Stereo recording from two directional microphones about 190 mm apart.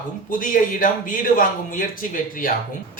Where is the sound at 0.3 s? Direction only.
45° left (ahead or behind).